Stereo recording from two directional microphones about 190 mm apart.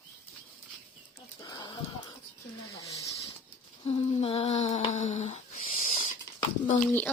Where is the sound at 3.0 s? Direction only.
15° left (ahead or behind).